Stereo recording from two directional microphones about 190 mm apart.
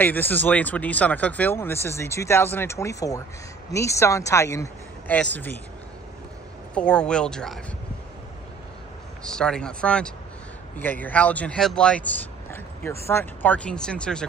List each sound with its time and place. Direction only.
0.0 s speech: 10° left (ahead or behind)
6.7 s speech: 5° left (ahead or behind)
9.2 s speech: 5° left (ahead or behind)